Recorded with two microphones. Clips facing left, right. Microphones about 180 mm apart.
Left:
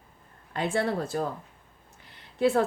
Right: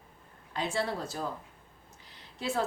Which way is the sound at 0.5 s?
55° left (ahead or behind).